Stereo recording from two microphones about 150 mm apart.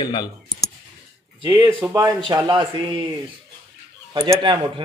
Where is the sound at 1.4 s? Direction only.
30° right (ahead or behind).